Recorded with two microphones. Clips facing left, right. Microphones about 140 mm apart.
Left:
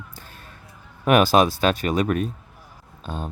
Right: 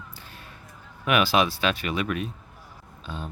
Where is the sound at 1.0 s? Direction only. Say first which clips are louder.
Left 6 dB; 45° left (ahead or behind).